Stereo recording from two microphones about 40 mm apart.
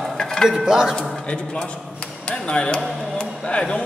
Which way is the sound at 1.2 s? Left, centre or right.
Left.